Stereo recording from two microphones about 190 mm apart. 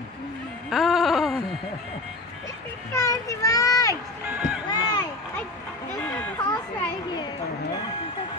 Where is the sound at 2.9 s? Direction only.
15° left (ahead or behind).